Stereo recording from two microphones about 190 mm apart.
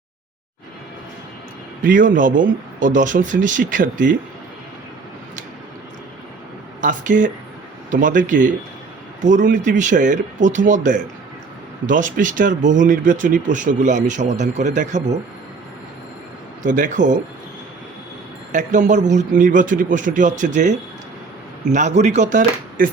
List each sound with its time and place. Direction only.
1.8 s speech: 45° right (ahead or behind)
6.8 s speech: 45° right (ahead or behind)
16.6 s speech: 45° right (ahead or behind)
18.5 s speech: 40° right (ahead or behind)